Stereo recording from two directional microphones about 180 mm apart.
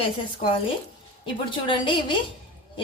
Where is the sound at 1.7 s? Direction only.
30° left (ahead or behind).